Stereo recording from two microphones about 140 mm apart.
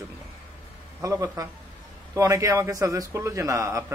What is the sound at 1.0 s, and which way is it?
Speech, 25° right (ahead or behind).